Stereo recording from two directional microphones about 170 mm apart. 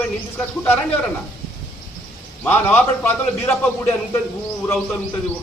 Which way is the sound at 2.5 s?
10° left (ahead or behind).